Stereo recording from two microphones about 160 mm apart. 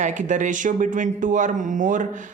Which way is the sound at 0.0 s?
50° right (ahead or behind).